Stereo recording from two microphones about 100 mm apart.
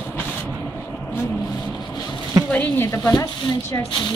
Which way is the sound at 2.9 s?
30° left (ahead or behind).